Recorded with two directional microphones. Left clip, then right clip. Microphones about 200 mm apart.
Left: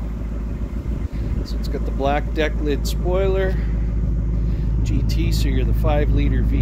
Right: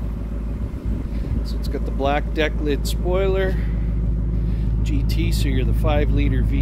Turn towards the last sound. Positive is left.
turn(degrees=5)  # may be behind; listen again after turning